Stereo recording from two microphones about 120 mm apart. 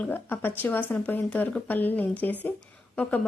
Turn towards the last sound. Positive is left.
turn(degrees=10)  # may be behind; listen again after turning